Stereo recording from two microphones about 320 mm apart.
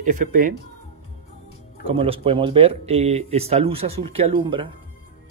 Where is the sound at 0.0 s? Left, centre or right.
Right.